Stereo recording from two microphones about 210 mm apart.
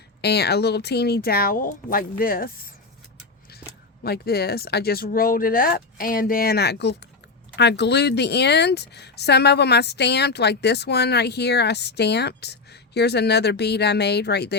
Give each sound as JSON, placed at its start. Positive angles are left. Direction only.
{"t": 0.2, "sound": "speech", "side_deg": 50}
{"t": 4.0, "sound": "speech", "side_deg": 50}